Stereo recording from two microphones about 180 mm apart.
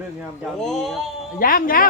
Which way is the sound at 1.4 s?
50° left (ahead or behind).